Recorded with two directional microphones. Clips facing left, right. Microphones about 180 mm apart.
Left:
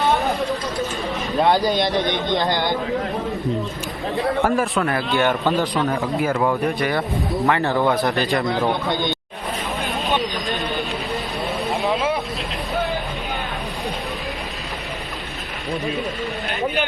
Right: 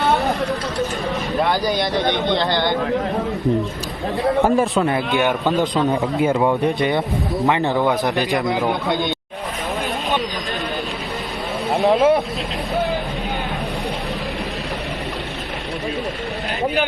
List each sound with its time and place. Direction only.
1.5 s speech: 20° left (ahead or behind)
4.4 s a man's voice: 25° right (ahead or behind); by 9.1 s centre (ahead or behind)
11.8 s vehicle: 45° right (ahead or behind)